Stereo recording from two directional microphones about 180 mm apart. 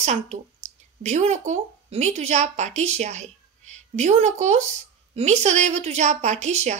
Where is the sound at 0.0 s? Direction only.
40° right (ahead or behind).